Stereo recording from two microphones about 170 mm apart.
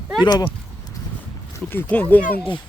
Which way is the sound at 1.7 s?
10° left (ahead or behind).